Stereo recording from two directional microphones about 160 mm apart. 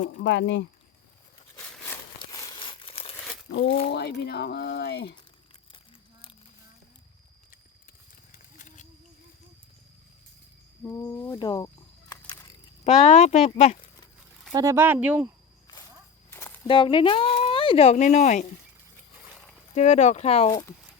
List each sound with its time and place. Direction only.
0.2 s speech: 90° left
1.9 s crumpling: 20° left (ahead or behind)
3.5 s speech: 85° left
8.3 s a sound: 50° left (ahead or behind)
10.8 s speech: 15° left (ahead or behind)
11.3 s a sound: 25° left (ahead or behind)
12.8 s speech: 45° left (ahead or behind)
14.5 s speech: 20° right (ahead or behind)
16.3 s walk: 15° left (ahead or behind)
16.6 s speech: 30° left (ahead or behind); by 18.4 s 50° left (ahead or behind)
19.7 s speech: 45° left (ahead or behind)